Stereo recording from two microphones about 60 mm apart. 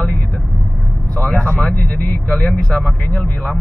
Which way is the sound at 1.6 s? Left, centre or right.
Left.